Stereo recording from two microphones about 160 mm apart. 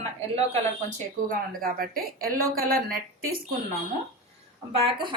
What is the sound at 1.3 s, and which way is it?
A woman's voice, 60° right (ahead or behind).